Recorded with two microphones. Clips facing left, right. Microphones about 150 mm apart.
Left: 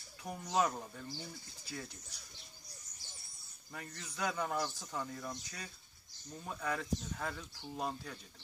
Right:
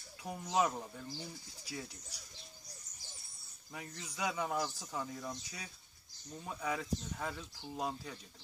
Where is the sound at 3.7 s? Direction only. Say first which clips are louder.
Right 1 dB; 5° right (ahead or behind).